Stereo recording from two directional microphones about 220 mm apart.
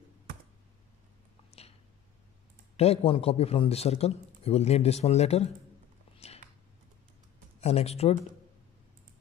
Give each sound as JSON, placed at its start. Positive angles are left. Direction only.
{"t": 2.8, "sound": "a man's voice", "side_deg": 25}
{"t": 6.1, "sound": "a sound", "side_deg": 30}
{"t": 7.6, "sound": "a man's voice", "side_deg": 30}